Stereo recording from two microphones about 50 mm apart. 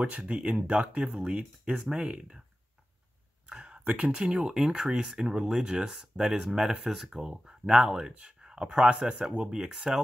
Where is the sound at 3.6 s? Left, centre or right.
Right.